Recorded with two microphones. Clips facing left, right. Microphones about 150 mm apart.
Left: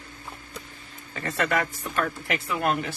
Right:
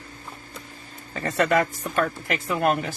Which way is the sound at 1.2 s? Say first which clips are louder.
Right 5 dB; 35° right (ahead or behind).